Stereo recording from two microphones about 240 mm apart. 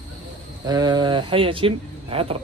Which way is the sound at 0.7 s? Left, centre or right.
Centre.